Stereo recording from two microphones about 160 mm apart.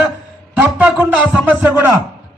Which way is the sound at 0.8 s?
10° right (ahead or behind).